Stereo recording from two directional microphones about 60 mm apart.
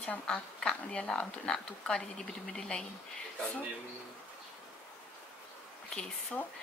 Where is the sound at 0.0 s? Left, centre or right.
Centre.